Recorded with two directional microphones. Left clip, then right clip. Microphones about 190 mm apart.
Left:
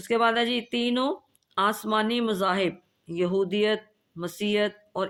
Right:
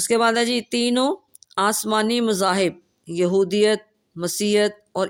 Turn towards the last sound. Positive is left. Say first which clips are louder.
# right 6 dB
turn(degrees=-50)  # may be behind; listen again after turning